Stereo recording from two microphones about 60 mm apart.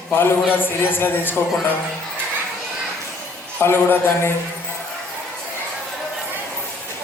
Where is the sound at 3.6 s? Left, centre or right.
Left.